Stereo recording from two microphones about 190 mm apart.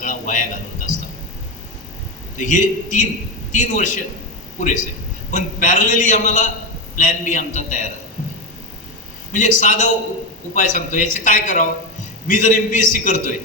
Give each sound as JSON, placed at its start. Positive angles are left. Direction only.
{"t": 0.0, "sound": "a sound", "side_deg": 40}
{"t": 2.4, "sound": "a man's voice", "side_deg": 40}
{"t": 5.3, "sound": "a man's voice", "side_deg": 40}
{"t": 9.3, "sound": "a man's voice", "side_deg": 40}